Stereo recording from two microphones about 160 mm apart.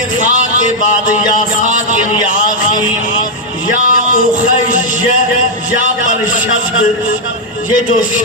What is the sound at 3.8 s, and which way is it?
Music, 60° left (ahead or behind).